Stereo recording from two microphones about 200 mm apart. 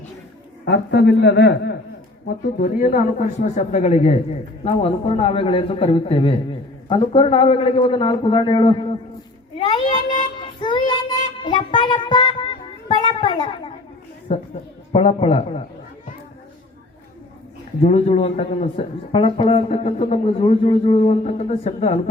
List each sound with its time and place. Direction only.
0.6 s a man's voice: 60° left (ahead or behind)
2.2 s a man's voice: 40° left (ahead or behind); by 8.7 s 25° left (ahead or behind)
9.6 s a sound: 25° left (ahead or behind)
10.6 s child singing: 25° left (ahead or behind)
14.9 s a man's voice: 30° left (ahead or behind)
17.8 s a man's voice: 30° left (ahead or behind)